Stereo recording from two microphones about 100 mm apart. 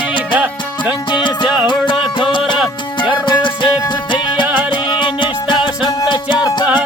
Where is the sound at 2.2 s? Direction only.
55° left (ahead or behind).